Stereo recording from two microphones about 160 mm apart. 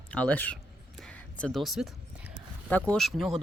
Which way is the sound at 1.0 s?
5° left (ahead or behind).